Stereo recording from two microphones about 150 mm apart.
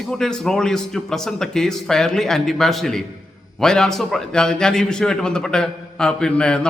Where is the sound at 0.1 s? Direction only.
5° left (ahead or behind).